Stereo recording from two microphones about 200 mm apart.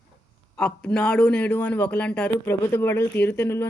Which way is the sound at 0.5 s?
5° left (ahead or behind).